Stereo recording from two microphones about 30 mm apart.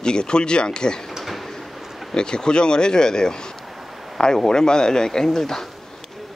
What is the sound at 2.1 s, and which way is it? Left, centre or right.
Speech, left.